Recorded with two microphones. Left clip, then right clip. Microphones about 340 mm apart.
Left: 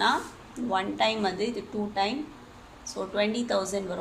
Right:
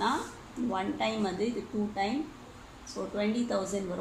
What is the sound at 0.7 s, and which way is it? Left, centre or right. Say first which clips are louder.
Speech: left 6 dB; left.